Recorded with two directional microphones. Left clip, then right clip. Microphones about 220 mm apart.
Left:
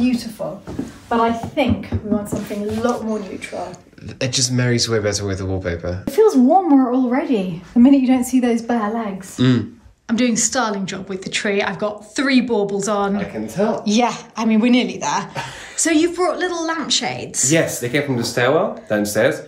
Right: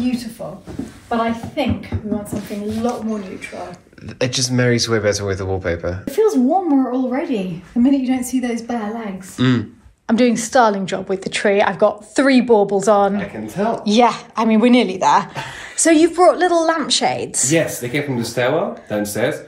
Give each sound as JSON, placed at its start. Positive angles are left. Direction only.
{"t": 1.0, "sound": "a woman's voice", "side_deg": 0}
{"t": 9.4, "sound": "a woman's voice", "side_deg": 10}